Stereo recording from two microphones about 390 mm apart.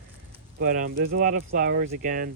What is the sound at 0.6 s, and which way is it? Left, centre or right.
Speech, right.